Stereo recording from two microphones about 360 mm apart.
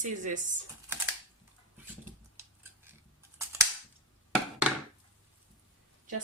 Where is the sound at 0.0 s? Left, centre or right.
Right.